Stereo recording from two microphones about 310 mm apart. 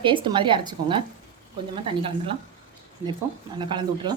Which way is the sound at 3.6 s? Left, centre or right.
Centre.